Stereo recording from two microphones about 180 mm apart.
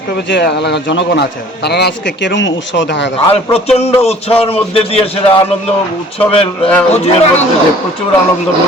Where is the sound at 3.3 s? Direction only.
35° left (ahead or behind).